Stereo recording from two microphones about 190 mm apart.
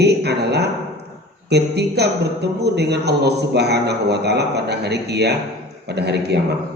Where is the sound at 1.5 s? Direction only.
60° right (ahead or behind).